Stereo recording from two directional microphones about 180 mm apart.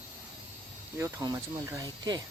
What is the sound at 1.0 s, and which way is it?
Speech, 15° right (ahead or behind).